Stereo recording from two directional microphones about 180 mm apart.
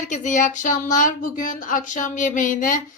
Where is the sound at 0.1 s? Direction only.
45° left (ahead or behind).